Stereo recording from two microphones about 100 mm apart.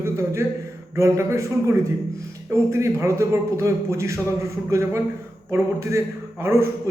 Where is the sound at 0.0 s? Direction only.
25° right (ahead or behind).